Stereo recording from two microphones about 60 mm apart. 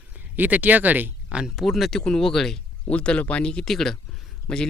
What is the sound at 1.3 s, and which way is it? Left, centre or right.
Speech, centre.